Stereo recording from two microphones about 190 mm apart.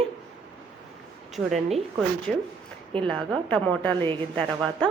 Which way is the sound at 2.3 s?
5° left (ahead or behind).